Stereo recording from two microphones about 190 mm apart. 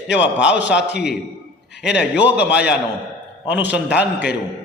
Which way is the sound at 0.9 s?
60° left (ahead or behind).